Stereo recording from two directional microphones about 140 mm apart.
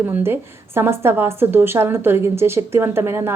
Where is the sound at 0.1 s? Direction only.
15° right (ahead or behind).